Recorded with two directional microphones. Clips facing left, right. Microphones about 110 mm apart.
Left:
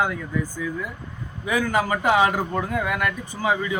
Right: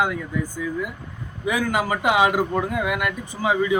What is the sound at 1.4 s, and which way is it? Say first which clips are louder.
A man's voice: even; 10° right (ahead or behind).